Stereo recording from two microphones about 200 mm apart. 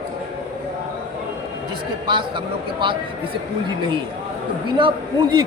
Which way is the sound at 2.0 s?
25° right (ahead or behind).